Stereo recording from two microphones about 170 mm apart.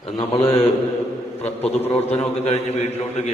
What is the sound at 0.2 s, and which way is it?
A man's voice, 35° left (ahead or behind).